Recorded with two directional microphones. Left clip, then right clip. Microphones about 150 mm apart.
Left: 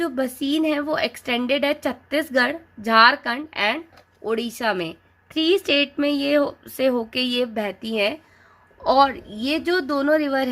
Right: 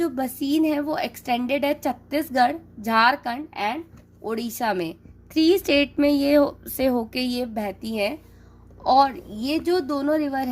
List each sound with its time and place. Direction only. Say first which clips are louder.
0.0 s a woman's voice: left 1 dB; 30° right (ahead or behind)
4.3 s a woman's voice: left 2 dB; 35° right (ahead or behind)
9.5 s a woman's voice: left 1 dB; 25° right (ahead or behind)